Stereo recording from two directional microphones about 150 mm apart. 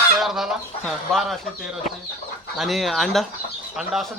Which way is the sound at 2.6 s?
Centre (ahead or behind).